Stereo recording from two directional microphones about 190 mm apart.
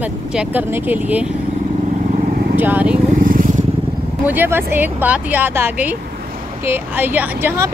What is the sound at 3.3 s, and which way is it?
Vehicle, 45° right (ahead or behind).